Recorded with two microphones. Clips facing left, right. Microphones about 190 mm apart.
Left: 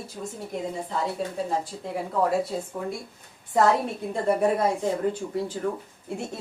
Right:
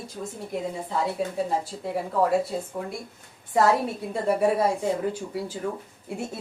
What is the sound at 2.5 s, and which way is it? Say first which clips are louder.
Speech: even; centre (ahead or behind).